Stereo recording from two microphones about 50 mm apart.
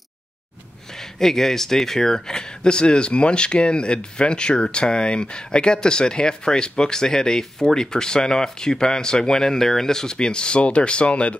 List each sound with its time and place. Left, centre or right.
1.2 s speech: centre